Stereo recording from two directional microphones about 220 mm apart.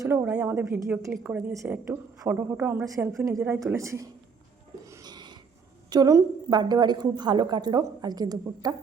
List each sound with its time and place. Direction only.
0.0 s a woman's voice: 10° right (ahead or behind)
4.9 s a sound: 15° right (ahead or behind)
5.9 s a woman's voice: 15° right (ahead or behind)